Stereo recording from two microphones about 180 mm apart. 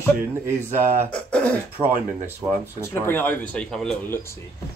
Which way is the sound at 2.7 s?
15° left (ahead or behind).